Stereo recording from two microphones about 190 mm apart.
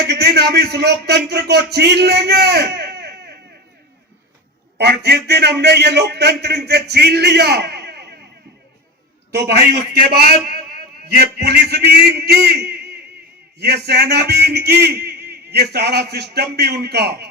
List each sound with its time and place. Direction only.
0.0 s a man's voice: 60° right (ahead or behind)
4.8 s a man's voice: 60° right (ahead or behind)
9.3 s a man's voice: 55° right (ahead or behind)